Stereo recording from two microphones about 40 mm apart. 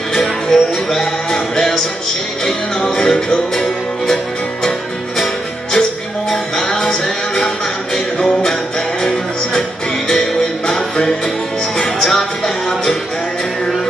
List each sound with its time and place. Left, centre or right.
0.1 s music: centre